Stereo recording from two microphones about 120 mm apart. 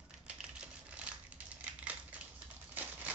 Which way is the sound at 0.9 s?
10° right (ahead or behind).